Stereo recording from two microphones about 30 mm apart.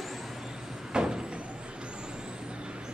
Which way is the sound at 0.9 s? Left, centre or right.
Right.